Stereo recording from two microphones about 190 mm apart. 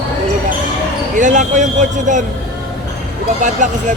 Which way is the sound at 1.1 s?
40° right (ahead or behind).